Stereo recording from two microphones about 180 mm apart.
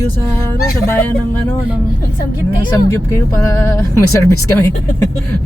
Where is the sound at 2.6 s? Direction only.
20° left (ahead or behind).